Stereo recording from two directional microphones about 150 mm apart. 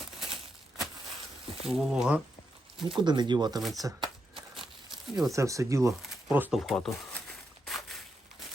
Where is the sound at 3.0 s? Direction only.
30° right (ahead or behind).